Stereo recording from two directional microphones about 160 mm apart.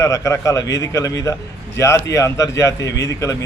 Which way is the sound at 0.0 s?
20° left (ahead or behind).